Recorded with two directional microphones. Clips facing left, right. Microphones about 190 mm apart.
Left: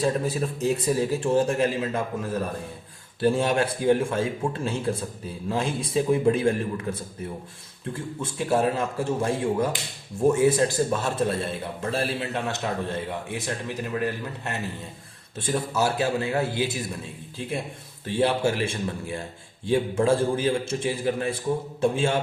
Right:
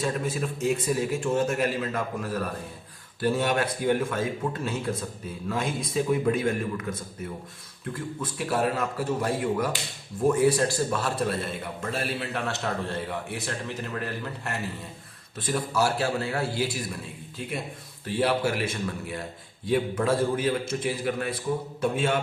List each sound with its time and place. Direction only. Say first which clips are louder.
0.0 s a man's voice: left 3 dB; 35° left (ahead or behind)
12.5 s a man's voice: left 2 dB; 20° left (ahead or behind)
18.0 s a man's voice: left 2 dB; 25° left (ahead or behind)